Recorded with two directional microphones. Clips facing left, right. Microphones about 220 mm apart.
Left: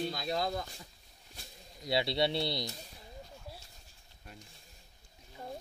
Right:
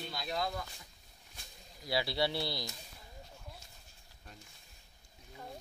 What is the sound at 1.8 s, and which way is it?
Speech, 25° left (ahead or behind).